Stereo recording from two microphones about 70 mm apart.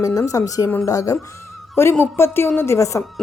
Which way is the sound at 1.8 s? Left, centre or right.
Left.